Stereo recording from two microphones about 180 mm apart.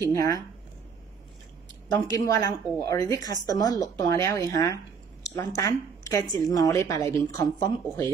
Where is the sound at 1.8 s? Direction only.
20° left (ahead or behind).